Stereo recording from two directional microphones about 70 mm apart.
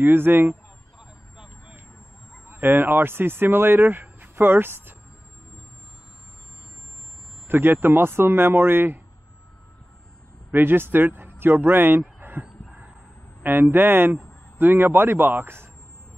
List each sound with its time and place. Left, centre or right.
0.0 s speech: right
0.9 s vehicle: centre
2.4 s speech: right
7.4 s speech: right
10.5 s speech: right
12.0 s a sound: right
13.4 s speech: right